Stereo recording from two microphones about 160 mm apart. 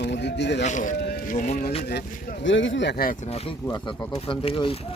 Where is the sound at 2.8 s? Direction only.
65° left (ahead or behind).